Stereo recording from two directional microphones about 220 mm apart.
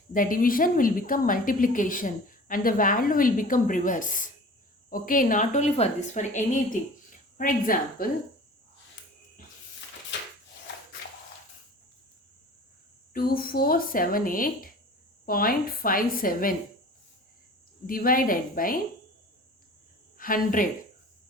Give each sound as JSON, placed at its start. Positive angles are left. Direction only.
{"t": 0.1, "sound": "a woman's voice", "side_deg": 40}
{"t": 10.1, "sound": "a sound", "side_deg": 55}
{"t": 13.1, "sound": "a woman's voice", "side_deg": 40}
{"t": 17.8, "sound": "a woman's voice", "side_deg": 40}
{"t": 20.1, "sound": "a woman's voice", "side_deg": 40}